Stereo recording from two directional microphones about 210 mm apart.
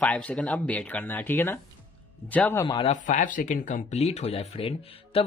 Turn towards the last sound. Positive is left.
turn(degrees=25)  # may be behind; listen again after turning